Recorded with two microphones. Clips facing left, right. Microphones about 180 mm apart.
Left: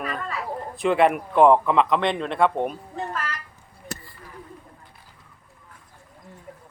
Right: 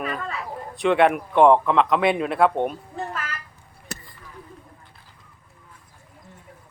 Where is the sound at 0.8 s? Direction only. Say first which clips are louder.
Right 1 dB; centre (ahead or behind).